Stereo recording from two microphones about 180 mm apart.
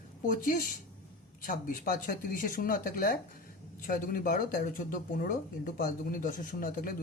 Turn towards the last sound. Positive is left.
turn(degrees=50)  # may be behind; listen again after turning